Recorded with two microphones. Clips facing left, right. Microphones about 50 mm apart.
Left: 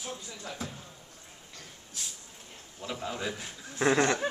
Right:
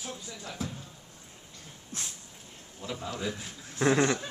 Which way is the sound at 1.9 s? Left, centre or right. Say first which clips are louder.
Right 3 dB; right.